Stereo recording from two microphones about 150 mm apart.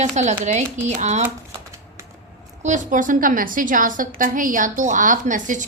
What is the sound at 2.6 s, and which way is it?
A woman's voice, 55° right (ahead or behind).